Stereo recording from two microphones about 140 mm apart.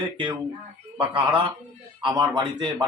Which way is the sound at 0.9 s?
35° right (ahead or behind).